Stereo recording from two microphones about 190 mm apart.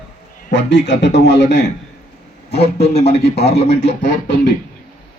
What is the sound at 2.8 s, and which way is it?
Speech, 35° left (ahead or behind).